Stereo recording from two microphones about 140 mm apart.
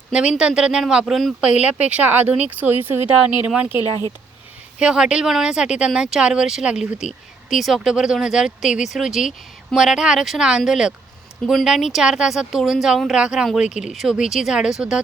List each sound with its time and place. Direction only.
0.1 s speech: 5° right (ahead or behind)
3.8 s speech: 25° left (ahead or behind)
4.8 s speech: 5° right (ahead or behind)